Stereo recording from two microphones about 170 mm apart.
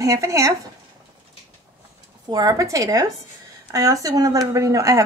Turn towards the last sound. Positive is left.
turn(degrees=-20)  # may be behind; listen again after turning